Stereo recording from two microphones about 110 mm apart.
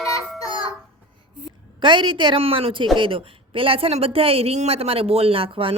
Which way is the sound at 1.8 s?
50° right (ahead or behind).